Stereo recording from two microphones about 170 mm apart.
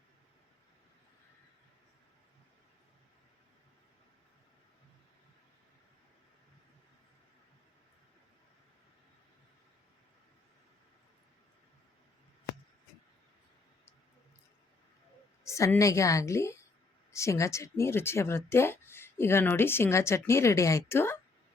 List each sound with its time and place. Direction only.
15.4 s speech: 15° left (ahead or behind)